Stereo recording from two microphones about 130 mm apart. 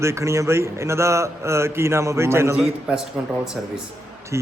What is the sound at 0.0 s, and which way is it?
Speech, 20° right (ahead or behind).